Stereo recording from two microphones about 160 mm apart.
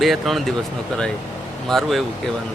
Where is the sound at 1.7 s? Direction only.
Centre (ahead or behind).